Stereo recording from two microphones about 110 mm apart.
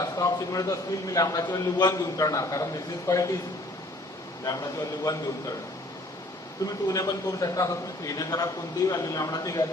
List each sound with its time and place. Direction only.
0.0 s a man's voice: 35° left (ahead or behind)
4.4 s a man's voice: 35° left (ahead or behind)
6.7 s a man's voice: 30° left (ahead or behind)